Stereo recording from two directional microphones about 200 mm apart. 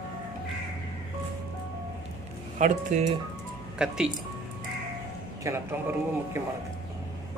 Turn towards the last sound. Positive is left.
turn(degrees=-10)  # may be behind; listen again after turning